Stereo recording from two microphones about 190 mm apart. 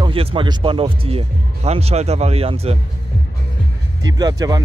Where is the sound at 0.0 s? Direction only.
30° right (ahead or behind).